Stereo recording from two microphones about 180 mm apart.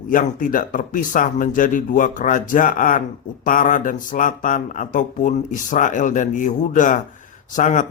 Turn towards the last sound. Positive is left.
turn(degrees=45)  # may be behind; listen again after turning